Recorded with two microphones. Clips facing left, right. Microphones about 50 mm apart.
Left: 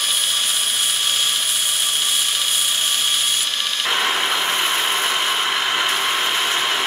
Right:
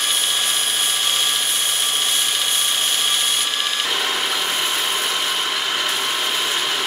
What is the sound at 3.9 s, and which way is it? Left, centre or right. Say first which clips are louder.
Vehicle: left 2 dB; centre.